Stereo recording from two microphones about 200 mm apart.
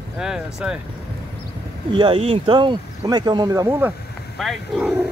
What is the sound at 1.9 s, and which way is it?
Speech, 25° right (ahead or behind).